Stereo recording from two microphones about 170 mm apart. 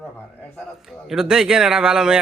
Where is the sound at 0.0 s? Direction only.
5° left (ahead or behind).